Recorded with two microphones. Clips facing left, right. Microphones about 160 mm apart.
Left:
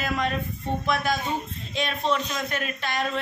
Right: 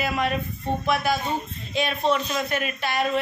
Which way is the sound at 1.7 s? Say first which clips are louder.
Right 3 dB; 5° right (ahead or behind).